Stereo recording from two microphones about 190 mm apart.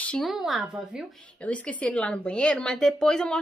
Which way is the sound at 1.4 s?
5° left (ahead or behind).